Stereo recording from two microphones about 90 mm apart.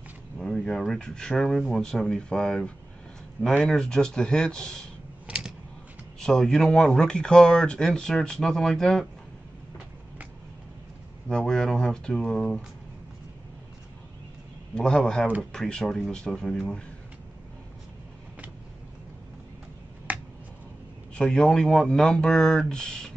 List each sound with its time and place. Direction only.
0.4 s speech: 5° left (ahead or behind)
5.3 s typing: 10° right (ahead or behind)
6.1 s speech: 5° left (ahead or behind)
11.2 s speech: 10° left (ahead or behind)
14.8 s speech: 10° left (ahead or behind)
20.1 s a sound: 15° right (ahead or behind)
21.1 s speech: 10° left (ahead or behind)